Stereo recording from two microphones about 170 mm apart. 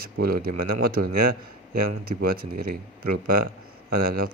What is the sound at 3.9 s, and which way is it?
Speech, 60° right (ahead or behind).